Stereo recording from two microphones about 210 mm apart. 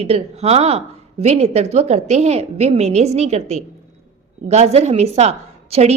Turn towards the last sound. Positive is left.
turn(degrees=-30)  # may be behind; listen again after turning